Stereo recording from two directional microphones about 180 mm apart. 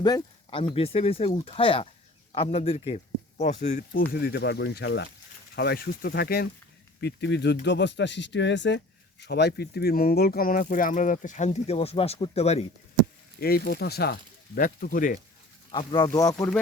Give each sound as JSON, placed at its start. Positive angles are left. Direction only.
{"t": 0.0, "sound": "speech", "side_deg": 25}
{"t": 5.5, "sound": "speech", "side_deg": 60}
{"t": 7.0, "sound": "speech", "side_deg": 70}
{"t": 9.2, "sound": "speech", "side_deg": 65}
{"t": 13.4, "sound": "speech", "side_deg": 55}
{"t": 15.7, "sound": "speech", "side_deg": 30}